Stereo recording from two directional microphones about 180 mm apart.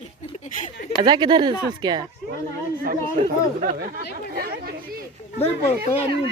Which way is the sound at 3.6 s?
55° right (ahead or behind).